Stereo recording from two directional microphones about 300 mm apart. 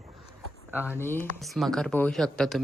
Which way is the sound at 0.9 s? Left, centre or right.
Centre.